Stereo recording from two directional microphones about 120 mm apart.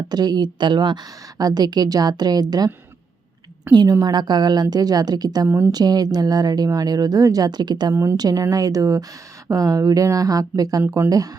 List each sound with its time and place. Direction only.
0.1 s a woman's voice: 35° right (ahead or behind)
3.7 s a woman's voice: 35° right (ahead or behind)
5.5 s speech: 20° right (ahead or behind)
5.7 s a woman's voice: 35° right (ahead or behind)